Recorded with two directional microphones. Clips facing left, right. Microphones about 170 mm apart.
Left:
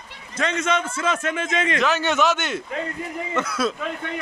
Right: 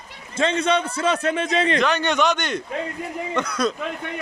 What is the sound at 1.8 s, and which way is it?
A man's voice, 5° left (ahead or behind).